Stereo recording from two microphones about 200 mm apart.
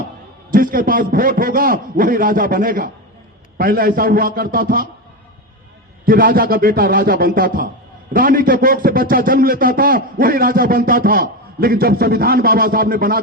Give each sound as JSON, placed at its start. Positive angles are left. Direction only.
{"t": 0.5, "sound": "a man's voice", "side_deg": -45}
{"t": 6.1, "sound": "a man's voice", "side_deg": -45}